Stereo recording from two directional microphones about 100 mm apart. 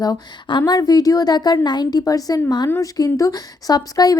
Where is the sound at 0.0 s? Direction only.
45° left (ahead or behind).